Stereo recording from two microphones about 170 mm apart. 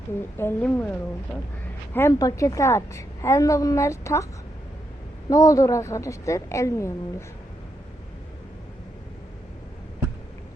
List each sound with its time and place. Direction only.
0.2 s a woman's voice: 15° left (ahead or behind)
1.9 s a woman's voice: 15° left (ahead or behind)
5.3 s a woman's voice: 20° left (ahead or behind)